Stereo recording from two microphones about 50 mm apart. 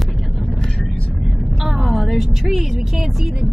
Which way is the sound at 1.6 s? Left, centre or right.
Centre.